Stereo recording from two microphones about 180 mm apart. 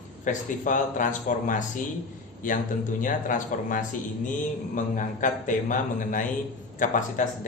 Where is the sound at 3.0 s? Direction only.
45° left (ahead or behind).